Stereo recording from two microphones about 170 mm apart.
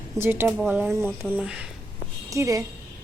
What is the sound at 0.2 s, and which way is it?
Speech, 10° right (ahead or behind).